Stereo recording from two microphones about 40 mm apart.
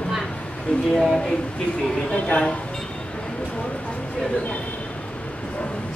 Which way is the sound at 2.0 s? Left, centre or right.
Left.